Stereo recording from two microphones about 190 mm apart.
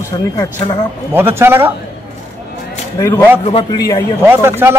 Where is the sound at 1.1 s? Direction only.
10° right (ahead or behind).